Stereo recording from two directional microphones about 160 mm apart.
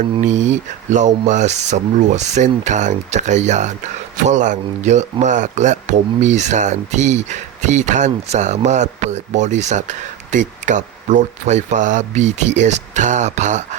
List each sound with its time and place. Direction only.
0.0 s speech: 50° right (ahead or behind)